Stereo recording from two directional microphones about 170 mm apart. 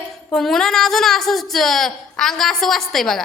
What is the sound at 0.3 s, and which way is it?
A woman's voice, centre (ahead or behind).